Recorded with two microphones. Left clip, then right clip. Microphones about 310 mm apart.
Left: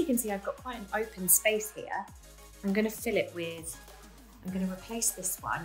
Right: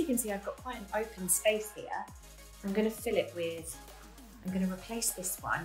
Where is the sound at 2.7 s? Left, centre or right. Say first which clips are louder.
Left 1 dB; left.